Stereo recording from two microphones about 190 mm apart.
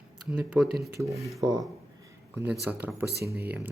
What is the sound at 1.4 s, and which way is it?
Speech, 20° right (ahead or behind).